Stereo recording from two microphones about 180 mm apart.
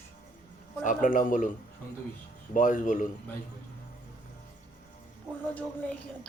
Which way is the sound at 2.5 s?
45° left (ahead or behind).